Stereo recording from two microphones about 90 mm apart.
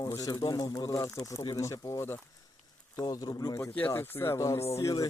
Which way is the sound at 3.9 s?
25° left (ahead or behind).